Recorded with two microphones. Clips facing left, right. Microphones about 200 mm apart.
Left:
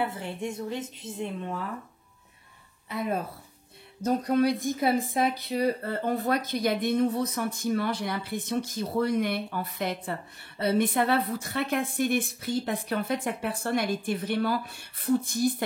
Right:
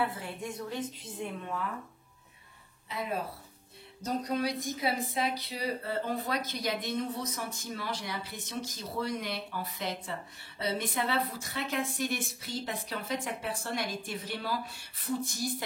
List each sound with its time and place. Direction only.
0.0 s speech: 25° left (ahead or behind)
2.9 s a woman's voice: 50° left (ahead or behind)